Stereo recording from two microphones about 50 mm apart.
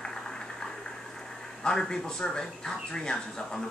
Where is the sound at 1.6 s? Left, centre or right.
Centre.